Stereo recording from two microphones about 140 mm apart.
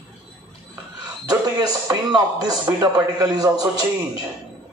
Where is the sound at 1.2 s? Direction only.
25° right (ahead or behind).